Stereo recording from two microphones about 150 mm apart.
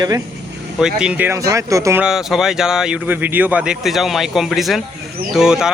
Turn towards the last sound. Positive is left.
turn(degrees=-5)  # may be behind; listen again after turning